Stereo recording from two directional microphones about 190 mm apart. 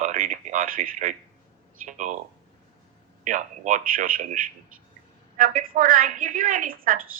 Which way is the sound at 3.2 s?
40° right (ahead or behind).